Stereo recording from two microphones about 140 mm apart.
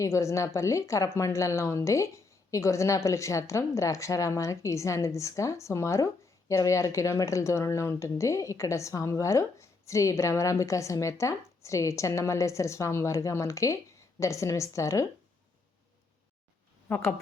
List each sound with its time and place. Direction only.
0.0 s a woman's voice: 20° left (ahead or behind)
16.9 s a woman's voice: 10° left (ahead or behind)